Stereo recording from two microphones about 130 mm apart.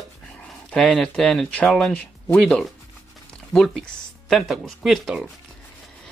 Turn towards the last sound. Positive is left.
turn(degrees=0)  # may be behind; listen again after turning